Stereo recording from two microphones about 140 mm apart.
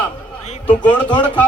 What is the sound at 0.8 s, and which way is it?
Speech, 35° left (ahead or behind).